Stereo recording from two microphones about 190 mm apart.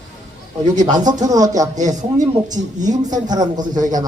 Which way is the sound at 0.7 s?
20° right (ahead or behind).